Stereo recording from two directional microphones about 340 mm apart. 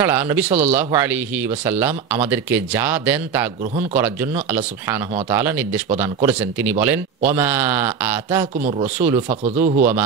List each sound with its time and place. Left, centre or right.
0.0 s speech: centre
8.5 s speech: right
8.9 s speech: centre
9.3 s speech: centre